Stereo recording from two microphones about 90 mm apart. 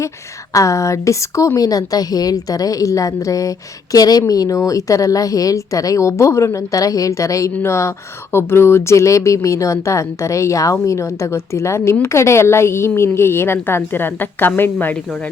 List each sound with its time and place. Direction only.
0.5 s a woman's voice: 35° left (ahead or behind)